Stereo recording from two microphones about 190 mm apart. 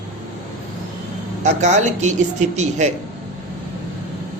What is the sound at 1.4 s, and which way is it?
Speech, 40° right (ahead or behind).